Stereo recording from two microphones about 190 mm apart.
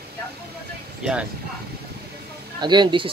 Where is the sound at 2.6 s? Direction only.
25° right (ahead or behind).